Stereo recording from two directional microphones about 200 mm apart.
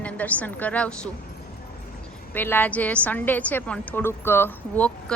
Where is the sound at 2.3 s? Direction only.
10° left (ahead or behind).